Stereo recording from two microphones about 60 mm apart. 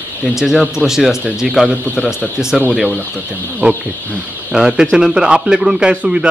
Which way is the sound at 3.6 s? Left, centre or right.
Right.